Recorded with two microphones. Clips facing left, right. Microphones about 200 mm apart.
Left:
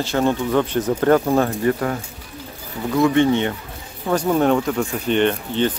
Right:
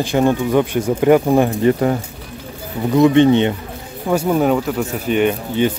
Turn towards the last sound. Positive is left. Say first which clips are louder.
# right 3 dB
turn(degrees=-10)  # may be behind; listen again after turning